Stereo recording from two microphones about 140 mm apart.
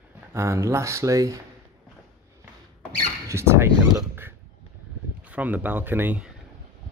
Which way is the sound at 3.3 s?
20° right (ahead or behind).